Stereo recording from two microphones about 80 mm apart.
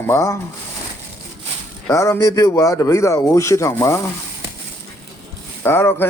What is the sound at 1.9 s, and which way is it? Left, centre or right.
A man's voice, left.